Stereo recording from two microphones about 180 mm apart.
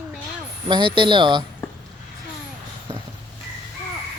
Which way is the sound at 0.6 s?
25° right (ahead or behind).